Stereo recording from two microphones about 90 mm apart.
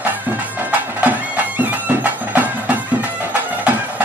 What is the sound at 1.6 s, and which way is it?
Music, 20° right (ahead or behind).